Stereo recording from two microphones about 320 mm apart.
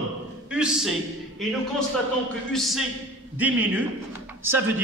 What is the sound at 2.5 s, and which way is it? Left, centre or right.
A man's voice, centre.